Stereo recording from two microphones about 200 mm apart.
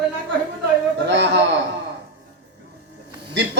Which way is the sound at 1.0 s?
65° right (ahead or behind).